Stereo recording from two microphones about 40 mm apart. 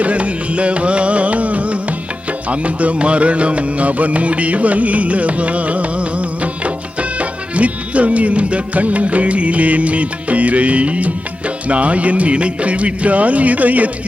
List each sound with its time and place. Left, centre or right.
0.0 s music: right